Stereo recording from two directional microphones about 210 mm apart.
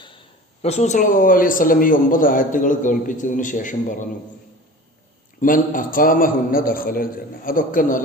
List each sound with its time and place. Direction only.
0.6 s a man's voice: 30° left (ahead or behind)
5.4 s a man's voice: 40° left (ahead or behind)